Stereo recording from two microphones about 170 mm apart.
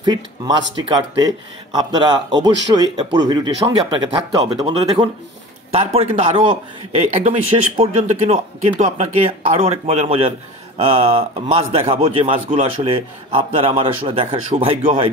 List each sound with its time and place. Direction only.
0.0 s speech: 25° right (ahead or behind)
7.0 s speech: 40° right (ahead or behind)